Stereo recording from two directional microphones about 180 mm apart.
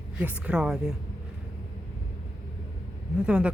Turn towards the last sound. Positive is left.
turn(degrees=-5)  # may be behind; listen again after turning